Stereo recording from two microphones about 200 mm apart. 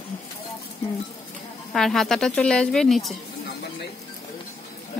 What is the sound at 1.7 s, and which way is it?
A woman's voice, centre (ahead or behind).